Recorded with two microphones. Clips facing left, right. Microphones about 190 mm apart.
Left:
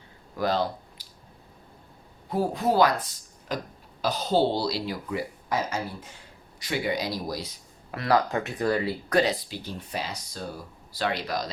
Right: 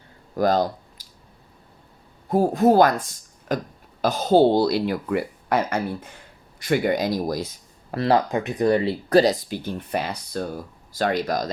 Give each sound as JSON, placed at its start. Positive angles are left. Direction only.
{"t": 0.3, "sound": "speech", "side_deg": -45}
{"t": 2.3, "sound": "a woman's voice", "side_deg": -45}
{"t": 7.9, "sound": "speech", "side_deg": -30}
{"t": 9.5, "sound": "speech", "side_deg": -55}
{"t": 10.9, "sound": "a woman's voice", "side_deg": -45}